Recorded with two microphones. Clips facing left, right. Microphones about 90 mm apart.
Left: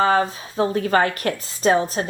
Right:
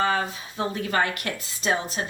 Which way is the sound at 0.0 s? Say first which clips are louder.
Left 6 dB; 40° left (ahead or behind).